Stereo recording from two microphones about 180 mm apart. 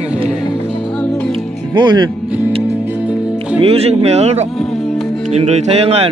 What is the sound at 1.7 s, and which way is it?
Speech, 25° right (ahead or behind).